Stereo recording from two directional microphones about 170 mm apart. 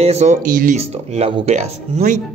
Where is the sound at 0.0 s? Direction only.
40° right (ahead or behind).